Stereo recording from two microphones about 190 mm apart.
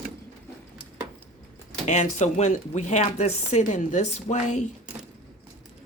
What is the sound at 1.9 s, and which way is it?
Speech, 40° left (ahead or behind).